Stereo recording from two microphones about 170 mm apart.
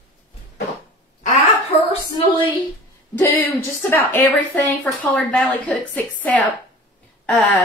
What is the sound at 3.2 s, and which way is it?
A woman's voice, 15° left (ahead or behind).